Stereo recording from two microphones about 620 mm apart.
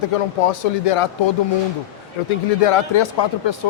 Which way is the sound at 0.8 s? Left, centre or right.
Left.